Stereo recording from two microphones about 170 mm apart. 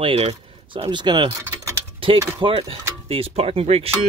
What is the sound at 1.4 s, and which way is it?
Speech, 15° right (ahead or behind).